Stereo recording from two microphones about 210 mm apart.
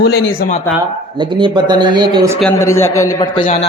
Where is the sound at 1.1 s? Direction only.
20° right (ahead or behind).